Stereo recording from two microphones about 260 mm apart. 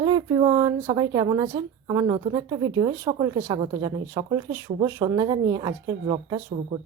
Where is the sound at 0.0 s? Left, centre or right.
Centre.